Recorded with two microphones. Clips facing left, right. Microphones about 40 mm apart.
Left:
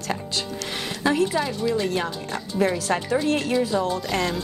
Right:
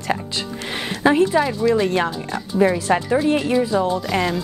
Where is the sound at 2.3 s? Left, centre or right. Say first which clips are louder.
Right 4 dB; centre.